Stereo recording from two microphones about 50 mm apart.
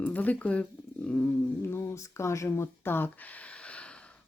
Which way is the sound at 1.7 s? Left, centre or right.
Left.